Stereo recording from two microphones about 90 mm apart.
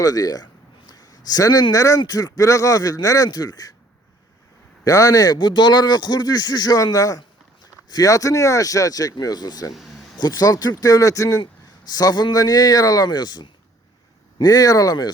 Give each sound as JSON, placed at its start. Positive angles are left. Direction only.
{"t": 0.0, "sound": "speech", "side_deg": 45}
{"t": 0.9, "sound": "a sound", "side_deg": 45}
{"t": 1.7, "sound": "speech", "side_deg": 40}
{"t": 4.9, "sound": "speech", "side_deg": 40}
{"t": 9.7, "sound": "a sound", "side_deg": 0}
{"t": 10.2, "sound": "speech", "side_deg": 45}